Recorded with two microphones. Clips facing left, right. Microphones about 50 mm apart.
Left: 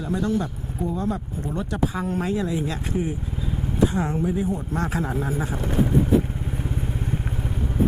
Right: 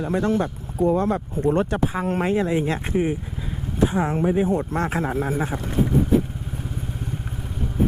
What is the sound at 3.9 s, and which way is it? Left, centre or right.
Speech, right.